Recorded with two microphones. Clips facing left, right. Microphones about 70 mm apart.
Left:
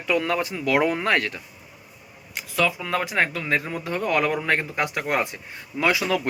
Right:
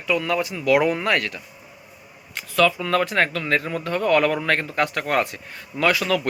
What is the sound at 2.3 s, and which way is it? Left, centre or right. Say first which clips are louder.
Speech: right 4 dB; centre.